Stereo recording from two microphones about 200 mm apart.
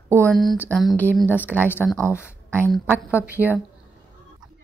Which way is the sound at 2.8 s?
10° right (ahead or behind).